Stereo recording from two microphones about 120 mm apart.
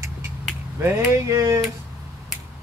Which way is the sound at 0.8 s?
25° right (ahead or behind).